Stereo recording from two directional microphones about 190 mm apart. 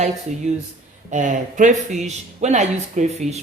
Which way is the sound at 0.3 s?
35° right (ahead or behind).